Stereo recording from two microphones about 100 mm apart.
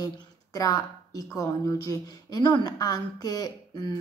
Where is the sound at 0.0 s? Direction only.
35° left (ahead or behind).